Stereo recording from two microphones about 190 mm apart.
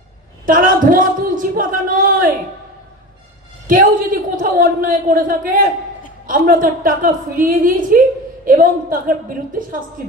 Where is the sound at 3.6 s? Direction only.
45° right (ahead or behind).